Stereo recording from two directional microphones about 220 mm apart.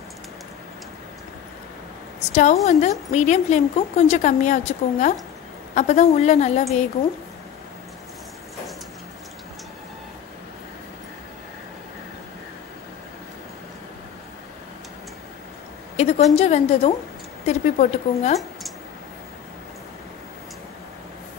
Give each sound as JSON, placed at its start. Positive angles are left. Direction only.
{"t": 2.3, "sound": "a woman's voice", "side_deg": 30}
{"t": 16.0, "sound": "a woman's voice", "side_deg": 30}